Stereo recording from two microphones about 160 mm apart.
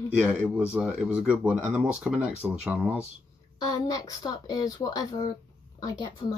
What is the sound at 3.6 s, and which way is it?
Speech, 25° left (ahead or behind).